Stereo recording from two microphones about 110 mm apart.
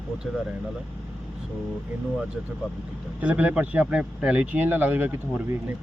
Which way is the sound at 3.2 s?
10° right (ahead or behind).